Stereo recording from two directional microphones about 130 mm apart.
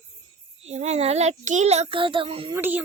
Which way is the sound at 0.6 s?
60° right (ahead or behind).